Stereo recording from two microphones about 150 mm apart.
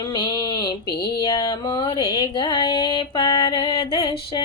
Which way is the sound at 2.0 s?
30° left (ahead or behind).